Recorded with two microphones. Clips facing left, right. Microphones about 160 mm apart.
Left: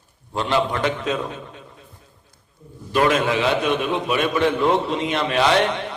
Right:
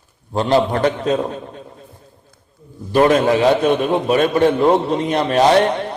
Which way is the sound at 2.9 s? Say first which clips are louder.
Right 6 dB; 35° right (ahead or behind).